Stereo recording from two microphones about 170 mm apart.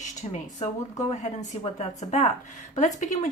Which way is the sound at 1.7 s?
40° left (ahead or behind).